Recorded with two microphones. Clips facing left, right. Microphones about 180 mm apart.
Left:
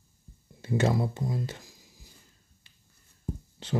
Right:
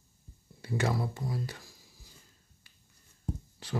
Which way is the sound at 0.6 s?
25° left (ahead or behind).